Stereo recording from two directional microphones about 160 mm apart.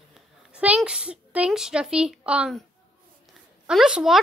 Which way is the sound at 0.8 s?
5° right (ahead or behind).